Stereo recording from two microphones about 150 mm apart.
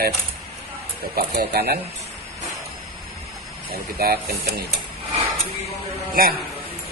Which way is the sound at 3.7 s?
90° right.